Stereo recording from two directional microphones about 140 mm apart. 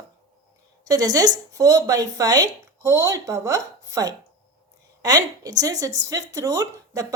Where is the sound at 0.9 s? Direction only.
25° right (ahead or behind).